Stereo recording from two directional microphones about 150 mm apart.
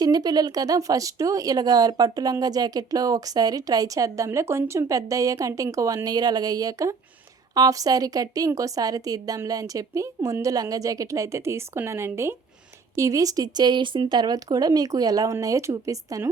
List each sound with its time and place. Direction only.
0.0 s speech: 25° right (ahead or behind)